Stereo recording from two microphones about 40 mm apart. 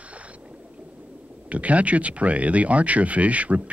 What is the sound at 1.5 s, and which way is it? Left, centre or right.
Speech, right.